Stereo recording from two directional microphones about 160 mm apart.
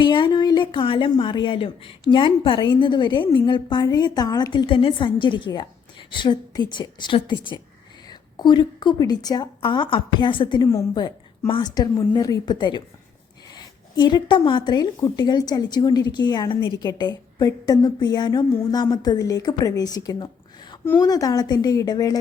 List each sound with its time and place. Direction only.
0.0 s speech: 30° left (ahead or behind)